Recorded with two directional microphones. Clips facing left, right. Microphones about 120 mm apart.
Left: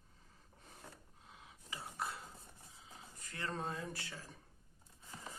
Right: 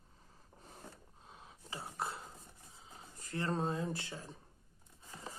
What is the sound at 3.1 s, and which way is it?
Speech, 30° right (ahead or behind).